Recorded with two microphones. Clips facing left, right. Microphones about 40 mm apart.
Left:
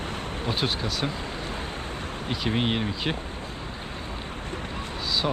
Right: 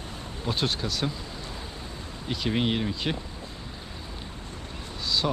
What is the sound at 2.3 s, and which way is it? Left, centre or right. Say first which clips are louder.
Speech: even; centre.